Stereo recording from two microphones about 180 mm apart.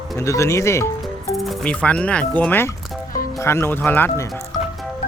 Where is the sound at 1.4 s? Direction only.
5° left (ahead or behind).